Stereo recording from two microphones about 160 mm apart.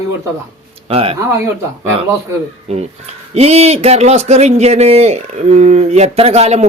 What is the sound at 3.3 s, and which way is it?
A man's voice, 40° right (ahead or behind).